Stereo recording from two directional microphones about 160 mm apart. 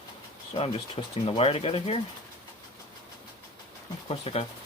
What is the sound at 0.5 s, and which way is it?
Speech, 35° left (ahead or behind).